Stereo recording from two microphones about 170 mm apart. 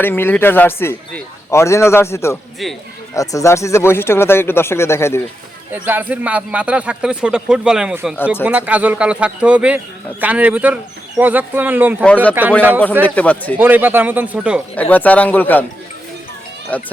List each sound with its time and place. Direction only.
0.0 s a man's voice: 10° left (ahead or behind)
5.7 s a man's voice: 10° right (ahead or behind)
12.0 s a man's voice: 10° left (ahead or behind)
12.3 s a man's voice: 10° right (ahead or behind)
13.1 s a man's voice: 10° left (ahead or behind)
13.6 s a man's voice: 10° right (ahead or behind)
14.8 s a man's voice: 10° left (ahead or behind)
16.7 s a man's voice: 10° left (ahead or behind)